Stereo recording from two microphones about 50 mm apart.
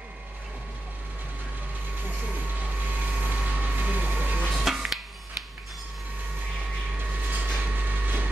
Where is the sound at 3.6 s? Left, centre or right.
Right.